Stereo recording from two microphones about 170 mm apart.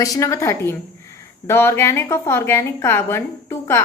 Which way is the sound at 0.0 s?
20° left (ahead or behind).